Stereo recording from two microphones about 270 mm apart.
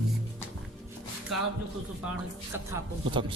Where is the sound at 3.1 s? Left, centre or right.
Centre.